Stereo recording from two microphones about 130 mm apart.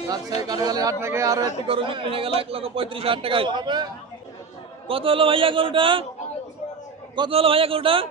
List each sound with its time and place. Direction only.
0.4 s speech: 30° right (ahead or behind)
1.7 s a man's voice: 40° right (ahead or behind)
4.8 s a man's voice: 45° right (ahead or behind)
7.2 s a man's voice: 45° right (ahead or behind)